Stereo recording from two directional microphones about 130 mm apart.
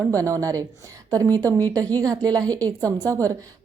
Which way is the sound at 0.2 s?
25° right (ahead or behind).